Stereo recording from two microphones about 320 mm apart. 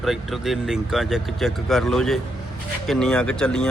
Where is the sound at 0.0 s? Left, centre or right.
Centre.